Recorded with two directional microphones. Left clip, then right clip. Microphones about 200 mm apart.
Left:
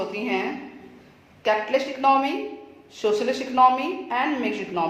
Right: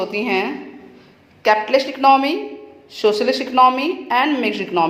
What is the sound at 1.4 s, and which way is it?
A woman's voice, 35° right (ahead or behind).